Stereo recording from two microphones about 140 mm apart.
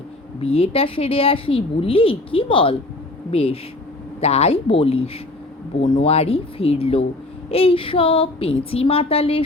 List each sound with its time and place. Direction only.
0.3 s a woman's voice: 45° left (ahead or behind)